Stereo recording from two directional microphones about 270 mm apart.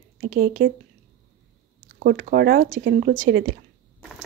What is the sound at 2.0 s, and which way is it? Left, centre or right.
A woman's voice, right.